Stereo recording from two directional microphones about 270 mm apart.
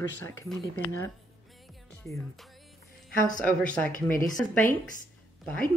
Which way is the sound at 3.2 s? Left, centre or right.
Right.